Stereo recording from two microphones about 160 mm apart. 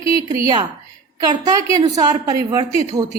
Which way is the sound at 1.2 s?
25° right (ahead or behind).